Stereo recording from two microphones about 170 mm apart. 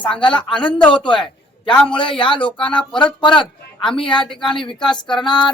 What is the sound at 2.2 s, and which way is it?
Speech, 30° left (ahead or behind).